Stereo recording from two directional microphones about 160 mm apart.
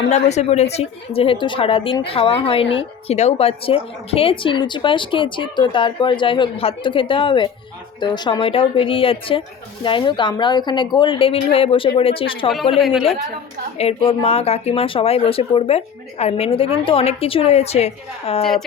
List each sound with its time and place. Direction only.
0.1 s a woman's voice: 45° left (ahead or behind)
12.7 s a woman's voice: centre (ahead or behind)
13.7 s speech: 40° left (ahead or behind)